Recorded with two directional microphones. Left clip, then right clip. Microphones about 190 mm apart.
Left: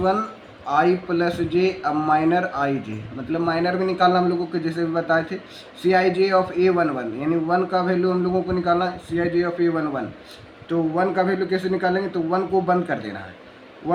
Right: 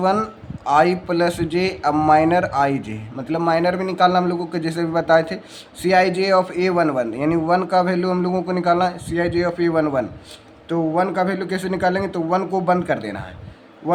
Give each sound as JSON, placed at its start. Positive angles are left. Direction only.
{"t": 0.0, "sound": "a man's voice", "side_deg": -40}